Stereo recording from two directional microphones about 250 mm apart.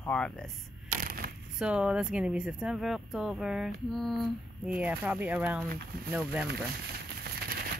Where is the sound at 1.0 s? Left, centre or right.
Right.